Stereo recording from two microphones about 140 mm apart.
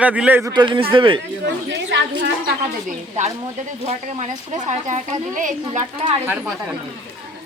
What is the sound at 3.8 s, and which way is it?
Speech, 55° right (ahead or behind).